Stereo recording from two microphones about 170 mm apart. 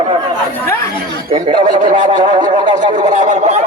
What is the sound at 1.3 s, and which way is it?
Speech, 30° right (ahead or behind).